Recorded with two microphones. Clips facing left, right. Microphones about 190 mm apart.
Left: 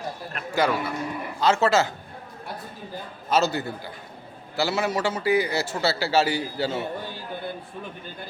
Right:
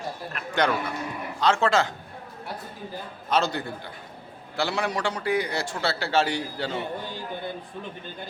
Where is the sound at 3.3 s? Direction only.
5° left (ahead or behind).